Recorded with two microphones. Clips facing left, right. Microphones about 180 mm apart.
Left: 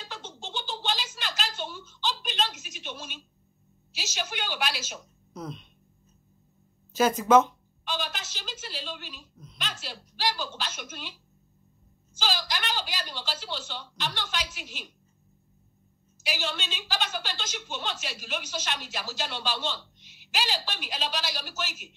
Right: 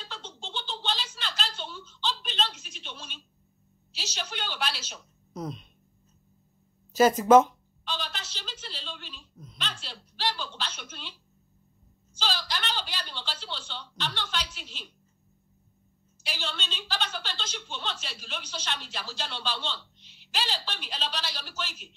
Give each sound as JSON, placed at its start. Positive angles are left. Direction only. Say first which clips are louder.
{"t": 0.3, "sound": "a sound", "louder": "left 2 dB", "side_deg": 10}
{"t": 4.2, "sound": "a woman's voice", "louder": "left 2 dB", "side_deg": 10}
{"t": 6.9, "sound": "speech", "louder": "right 3 dB", "side_deg": -45}
{"t": 7.9, "sound": "a sound", "louder": "left 2 dB", "side_deg": 10}
{"t": 12.2, "sound": "a woman's voice", "louder": "left 1 dB", "side_deg": 10}
{"t": 16.3, "sound": "a woman's voice", "louder": "left 4 dB", "side_deg": 10}